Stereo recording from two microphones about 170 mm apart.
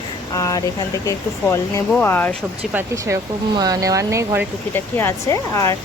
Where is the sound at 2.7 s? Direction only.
15° right (ahead or behind).